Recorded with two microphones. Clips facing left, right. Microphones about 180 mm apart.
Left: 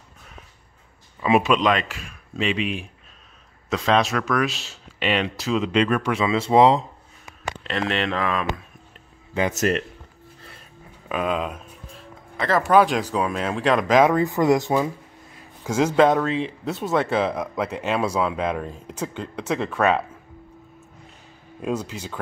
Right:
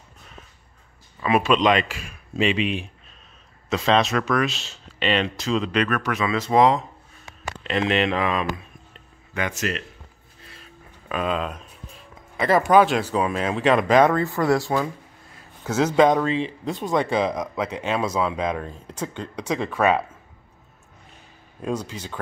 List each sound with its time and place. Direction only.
1.2 s speech: 20° left (ahead or behind)
1.5 s speech: centre (ahead or behind)
5.7 s speech: 25° left (ahead or behind)
7.6 s speech: 5° right (ahead or behind)
9.6 s speech: 50° left (ahead or behind)
11.1 s speech: 10° left (ahead or behind)
12.7 s speech: 10° right (ahead or behind)
14.1 s speech: 15° left (ahead or behind); by 20.0 s centre (ahead or behind)
21.5 s speech: 5° left (ahead or behind)